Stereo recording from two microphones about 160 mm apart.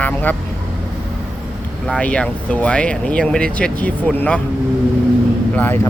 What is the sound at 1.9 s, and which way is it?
Speech, 5° left (ahead or behind).